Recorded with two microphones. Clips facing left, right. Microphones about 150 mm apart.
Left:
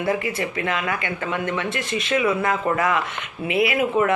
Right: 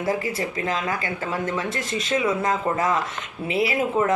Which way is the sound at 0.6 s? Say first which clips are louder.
Even; 35° right (ahead or behind).